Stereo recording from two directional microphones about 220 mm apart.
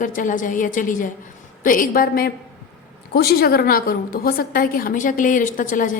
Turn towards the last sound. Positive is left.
turn(degrees=35)  # may be behind; listen again after turning